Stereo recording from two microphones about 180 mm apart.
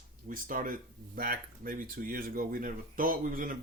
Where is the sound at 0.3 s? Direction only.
50° right (ahead or behind).